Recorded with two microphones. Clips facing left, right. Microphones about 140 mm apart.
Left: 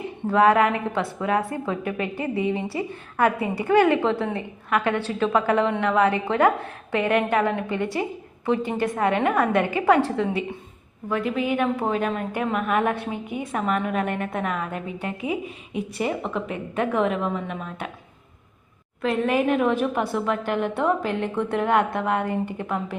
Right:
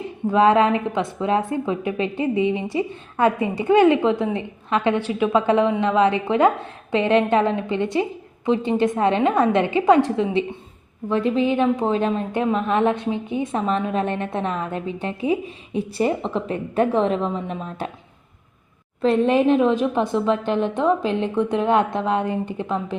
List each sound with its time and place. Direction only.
0.3 s a woman's voice: 20° right (ahead or behind)
11.1 s a woman's voice: 30° right (ahead or behind)
19.0 s a woman's voice: 30° right (ahead or behind)